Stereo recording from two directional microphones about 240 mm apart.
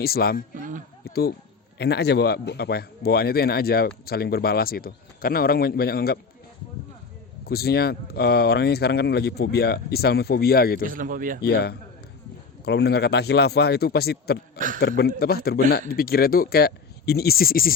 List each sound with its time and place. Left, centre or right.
0.0 s a man's voice: left
7.4 s a man's voice: left
10.8 s speech: right
11.4 s a man's voice: left